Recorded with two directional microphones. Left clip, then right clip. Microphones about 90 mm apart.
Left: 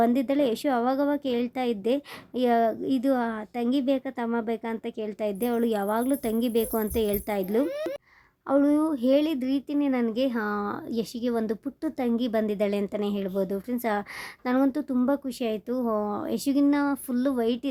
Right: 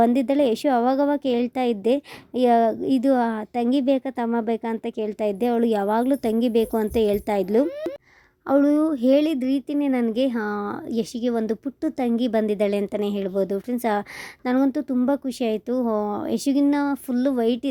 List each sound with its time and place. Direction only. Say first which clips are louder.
0.0 s a woman's voice: right 4 dB; 40° right (ahead or behind)